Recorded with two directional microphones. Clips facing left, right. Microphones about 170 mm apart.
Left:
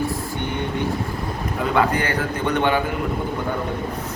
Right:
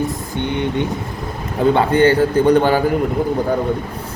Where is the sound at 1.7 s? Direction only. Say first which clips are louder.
Right 6 dB; 30° right (ahead or behind).